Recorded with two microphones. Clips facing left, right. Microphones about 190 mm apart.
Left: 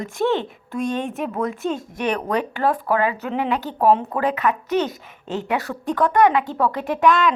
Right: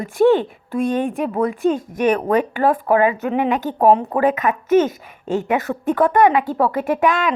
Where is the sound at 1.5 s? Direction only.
50° right (ahead or behind).